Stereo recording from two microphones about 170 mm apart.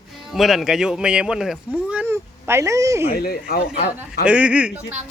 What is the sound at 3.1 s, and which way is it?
Speech, 65° left (ahead or behind).